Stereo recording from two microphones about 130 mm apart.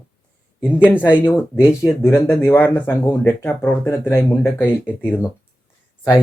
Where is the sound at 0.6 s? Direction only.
15° left (ahead or behind).